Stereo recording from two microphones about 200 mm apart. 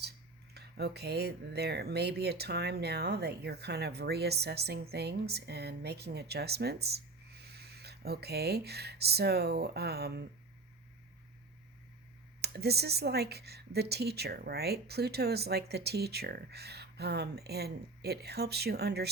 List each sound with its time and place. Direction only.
0.5 s speech: 55° right (ahead or behind)
12.4 s speech: 55° right (ahead or behind)